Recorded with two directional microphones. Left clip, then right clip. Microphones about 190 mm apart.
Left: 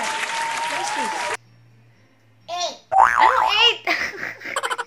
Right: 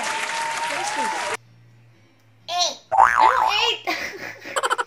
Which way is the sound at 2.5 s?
5° left (ahead or behind).